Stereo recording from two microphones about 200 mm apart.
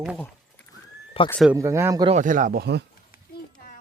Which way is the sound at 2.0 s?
40° right (ahead or behind).